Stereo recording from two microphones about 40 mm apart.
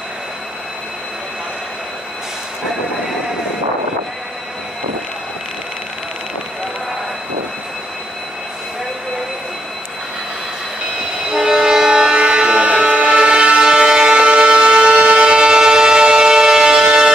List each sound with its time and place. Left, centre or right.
11.2 s train: centre